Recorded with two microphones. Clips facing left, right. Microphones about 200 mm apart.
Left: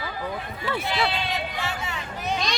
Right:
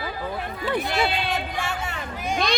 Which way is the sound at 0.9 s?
45° right (ahead or behind).